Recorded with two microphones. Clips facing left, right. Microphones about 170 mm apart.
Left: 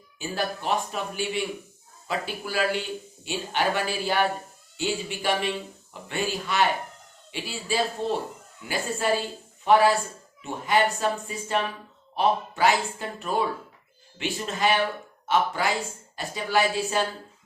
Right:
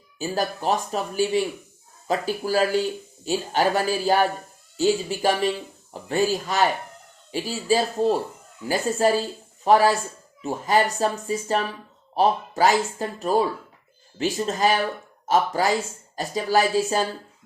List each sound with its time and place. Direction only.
0.2 s speech: 40° right (ahead or behind)